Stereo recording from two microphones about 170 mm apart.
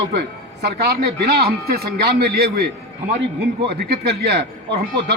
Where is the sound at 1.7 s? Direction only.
65° right (ahead or behind).